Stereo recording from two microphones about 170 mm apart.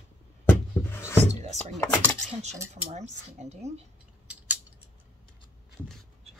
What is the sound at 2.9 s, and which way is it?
Speech, 40° right (ahead or behind).